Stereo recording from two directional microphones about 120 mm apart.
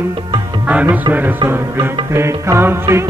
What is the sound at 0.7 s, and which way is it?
Music, 10° right (ahead or behind).